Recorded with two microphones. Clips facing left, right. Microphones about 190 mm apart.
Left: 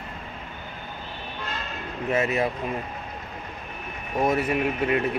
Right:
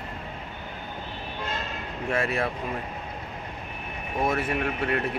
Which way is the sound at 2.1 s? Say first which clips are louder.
Left 3 dB; 5° left (ahead or behind).